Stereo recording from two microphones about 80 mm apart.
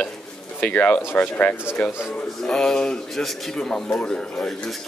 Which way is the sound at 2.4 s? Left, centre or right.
Centre.